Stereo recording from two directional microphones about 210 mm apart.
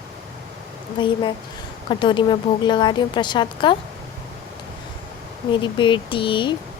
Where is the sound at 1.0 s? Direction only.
20° left (ahead or behind).